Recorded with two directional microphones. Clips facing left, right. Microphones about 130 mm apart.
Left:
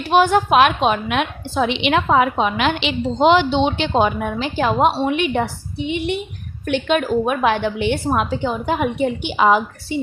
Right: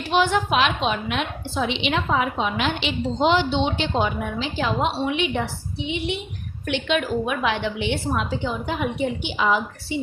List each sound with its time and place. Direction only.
0.1 s a woman's voice: 45° left (ahead or behind)